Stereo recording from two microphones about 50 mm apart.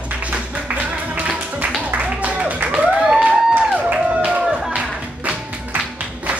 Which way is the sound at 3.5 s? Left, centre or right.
Right.